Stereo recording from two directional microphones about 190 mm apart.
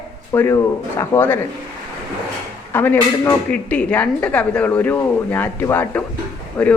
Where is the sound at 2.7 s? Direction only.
10° left (ahead or behind).